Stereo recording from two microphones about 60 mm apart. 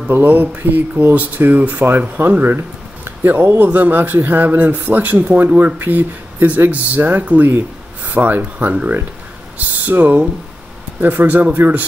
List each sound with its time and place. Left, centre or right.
0.1 s a man's voice: right